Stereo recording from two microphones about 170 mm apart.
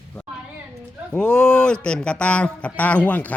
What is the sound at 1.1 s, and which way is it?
A man's voice, 5° left (ahead or behind).